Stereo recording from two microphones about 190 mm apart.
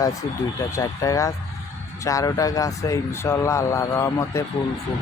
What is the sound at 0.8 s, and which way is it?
Speech, 15° left (ahead or behind).